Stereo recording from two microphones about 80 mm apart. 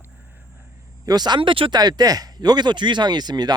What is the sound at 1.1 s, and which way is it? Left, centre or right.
Speech, right.